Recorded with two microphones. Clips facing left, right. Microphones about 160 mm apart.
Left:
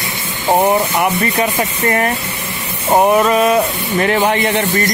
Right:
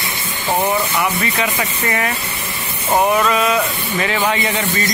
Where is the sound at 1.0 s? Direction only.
45° left (ahead or behind).